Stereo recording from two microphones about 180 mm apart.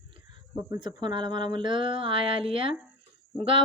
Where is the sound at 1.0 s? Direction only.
25° right (ahead or behind).